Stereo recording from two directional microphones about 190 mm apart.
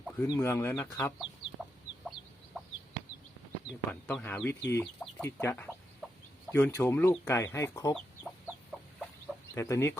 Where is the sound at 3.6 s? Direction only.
Centre (ahead or behind).